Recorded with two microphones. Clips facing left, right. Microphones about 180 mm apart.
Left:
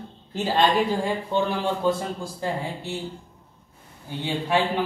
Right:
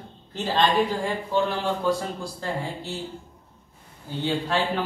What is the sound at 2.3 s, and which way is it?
Speech, 15° left (ahead or behind).